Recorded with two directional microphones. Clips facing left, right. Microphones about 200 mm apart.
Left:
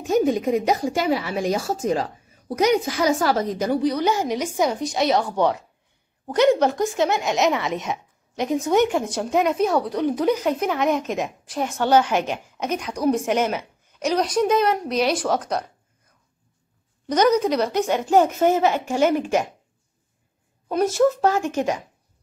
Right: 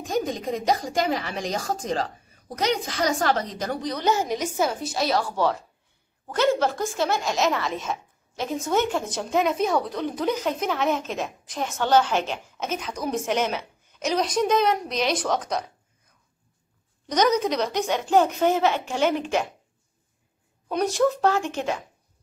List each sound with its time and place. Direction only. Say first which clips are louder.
0.0 s a woman's voice: left 7 dB; 10° left (ahead or behind)
17.1 s a woman's voice: left 3 dB; 10° left (ahead or behind)
20.7 s a woman's voice: left 3 dB; 5° left (ahead or behind)